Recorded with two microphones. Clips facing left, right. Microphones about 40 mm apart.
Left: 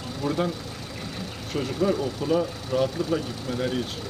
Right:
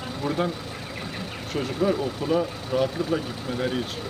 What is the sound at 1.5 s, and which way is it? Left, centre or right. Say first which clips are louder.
Speech: even; centre.